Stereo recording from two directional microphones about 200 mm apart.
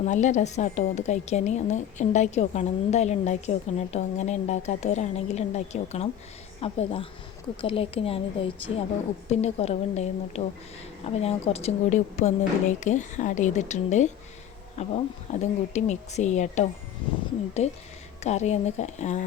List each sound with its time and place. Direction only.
0.0 s a woman's voice: 35° left (ahead or behind)